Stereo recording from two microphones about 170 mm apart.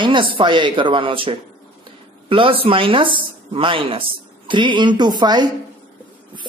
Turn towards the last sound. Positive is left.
turn(degrees=-25)  # may be behind; listen again after turning